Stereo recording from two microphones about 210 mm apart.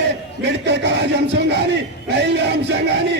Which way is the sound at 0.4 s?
55° right (ahead or behind).